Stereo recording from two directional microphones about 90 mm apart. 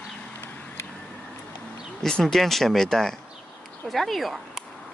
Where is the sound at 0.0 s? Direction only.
10° left (ahead or behind).